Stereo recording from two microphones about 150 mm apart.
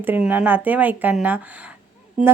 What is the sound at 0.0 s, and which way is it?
A woman's voice, 10° right (ahead or behind).